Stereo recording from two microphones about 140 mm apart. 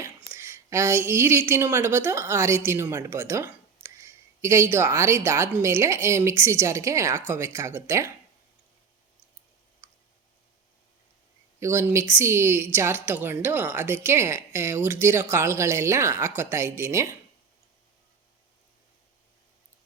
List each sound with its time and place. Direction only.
0.0 s a woman's voice: 20° right (ahead or behind)
9.8 s a sound: 20° right (ahead or behind)
11.6 s a woman's voice: 20° right (ahead or behind)